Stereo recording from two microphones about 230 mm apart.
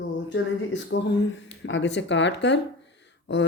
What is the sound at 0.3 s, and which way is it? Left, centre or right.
Speech, left.